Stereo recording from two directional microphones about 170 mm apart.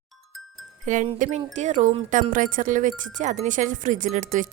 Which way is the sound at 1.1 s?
50° right (ahead or behind).